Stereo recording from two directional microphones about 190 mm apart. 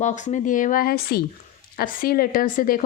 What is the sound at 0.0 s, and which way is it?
A woman's voice, 40° left (ahead or behind).